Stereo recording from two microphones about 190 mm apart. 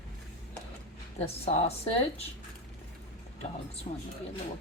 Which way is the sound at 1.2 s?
35° left (ahead or behind).